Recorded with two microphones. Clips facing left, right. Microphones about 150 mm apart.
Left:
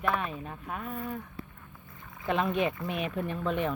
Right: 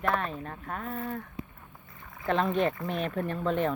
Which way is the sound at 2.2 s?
10° left (ahead or behind).